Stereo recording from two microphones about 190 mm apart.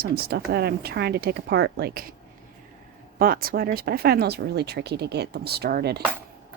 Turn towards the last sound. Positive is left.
turn(degrees=-55)  # may be behind; listen again after turning